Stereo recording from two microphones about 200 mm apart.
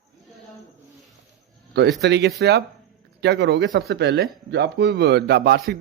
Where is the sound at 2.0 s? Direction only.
60° right (ahead or behind).